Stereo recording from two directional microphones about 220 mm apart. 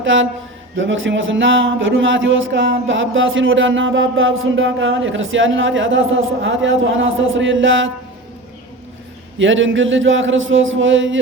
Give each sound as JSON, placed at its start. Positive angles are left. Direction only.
{"t": 0.0, "sound": "a man's voice", "side_deg": -60}
{"t": 9.4, "sound": "speech", "side_deg": -60}